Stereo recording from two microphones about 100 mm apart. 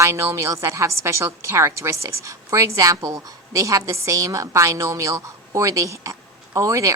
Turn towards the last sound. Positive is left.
turn(degrees=-30)  # may be behind; listen again after turning